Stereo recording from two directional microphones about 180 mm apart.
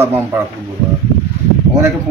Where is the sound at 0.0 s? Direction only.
10° right (ahead or behind).